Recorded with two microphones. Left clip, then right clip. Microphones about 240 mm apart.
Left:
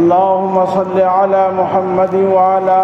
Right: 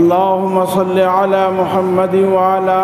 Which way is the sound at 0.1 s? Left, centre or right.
Right.